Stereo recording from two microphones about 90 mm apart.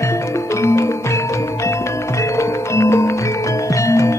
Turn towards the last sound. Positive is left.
turn(degrees=30)  # may be behind; listen again after turning